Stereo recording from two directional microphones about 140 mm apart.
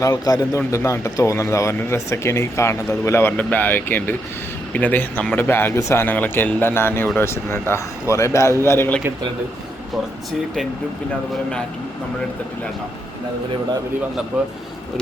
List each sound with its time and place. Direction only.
0.0 s speech: 25° left (ahead or behind)
14.3 s speech: 10° right (ahead or behind)